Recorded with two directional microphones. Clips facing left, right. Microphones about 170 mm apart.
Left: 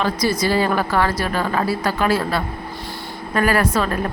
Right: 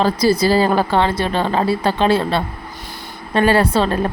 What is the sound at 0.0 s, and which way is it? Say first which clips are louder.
Speech: right 5 dB; 30° right (ahead or behind).